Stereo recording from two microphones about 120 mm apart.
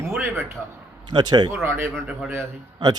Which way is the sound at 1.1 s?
35° right (ahead or behind).